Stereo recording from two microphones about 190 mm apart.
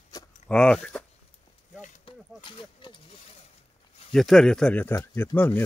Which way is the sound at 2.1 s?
25° left (ahead or behind).